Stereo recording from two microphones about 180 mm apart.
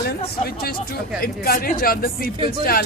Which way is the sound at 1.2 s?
55° left (ahead or behind).